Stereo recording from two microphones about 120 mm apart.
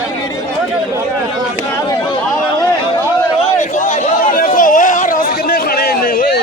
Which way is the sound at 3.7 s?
85° left.